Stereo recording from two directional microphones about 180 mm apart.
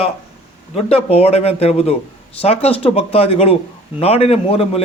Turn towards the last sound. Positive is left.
turn(degrees=35)  # may be behind; listen again after turning